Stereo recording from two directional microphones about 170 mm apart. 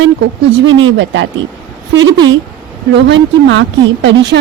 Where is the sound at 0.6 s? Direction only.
90° right.